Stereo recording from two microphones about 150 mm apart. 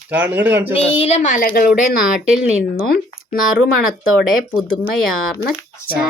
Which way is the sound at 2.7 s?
80° left.